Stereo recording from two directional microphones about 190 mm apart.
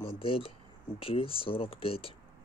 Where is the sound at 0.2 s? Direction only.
30° left (ahead or behind).